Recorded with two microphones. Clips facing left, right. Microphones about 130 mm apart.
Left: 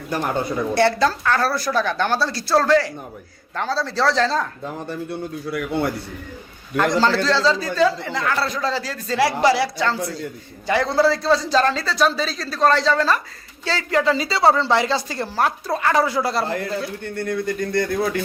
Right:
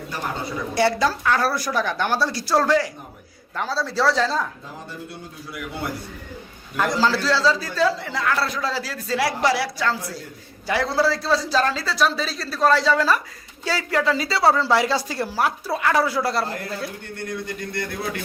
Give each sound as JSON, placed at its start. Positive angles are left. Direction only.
{"t": 0.7, "sound": "a woman's voice", "side_deg": -10}
{"t": 5.5, "sound": "a man's voice", "side_deg": 60}
{"t": 6.7, "sound": "a man's voice", "side_deg": -5}
{"t": 17.2, "sound": "speech", "side_deg": 45}